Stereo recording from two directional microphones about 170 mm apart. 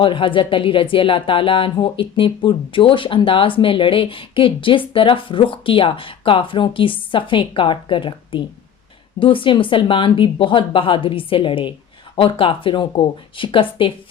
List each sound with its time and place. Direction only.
0.0 s speech: 30° left (ahead or behind)